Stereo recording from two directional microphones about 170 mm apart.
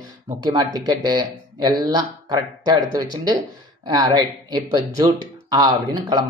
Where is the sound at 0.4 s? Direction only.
20° right (ahead or behind).